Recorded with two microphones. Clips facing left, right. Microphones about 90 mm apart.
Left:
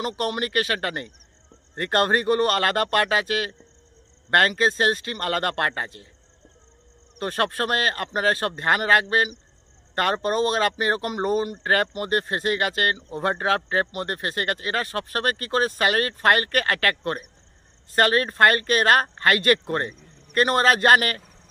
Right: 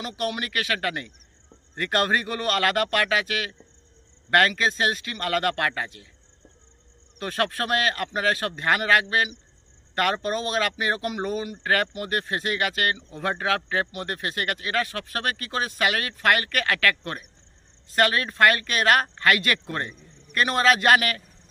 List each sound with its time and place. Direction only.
0.0 s speech: 40° left (ahead or behind)
7.2 s speech: 40° left (ahead or behind)